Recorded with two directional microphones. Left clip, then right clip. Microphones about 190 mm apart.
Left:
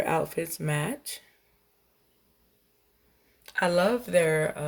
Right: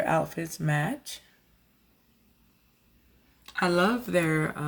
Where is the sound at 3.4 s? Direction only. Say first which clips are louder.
Left 1 dB; 50° left (ahead or behind).